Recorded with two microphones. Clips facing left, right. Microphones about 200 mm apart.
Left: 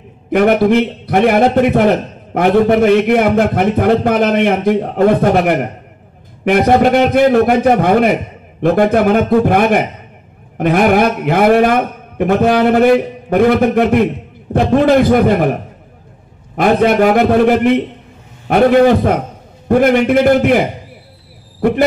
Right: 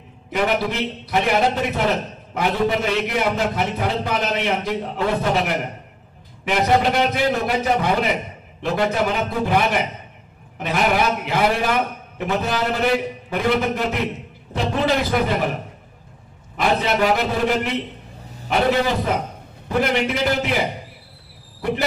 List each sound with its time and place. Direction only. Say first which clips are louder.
0.3 s a man's voice: left 11 dB; 55° left (ahead or behind)
16.5 s a man's voice: left 9 dB; 50° left (ahead or behind)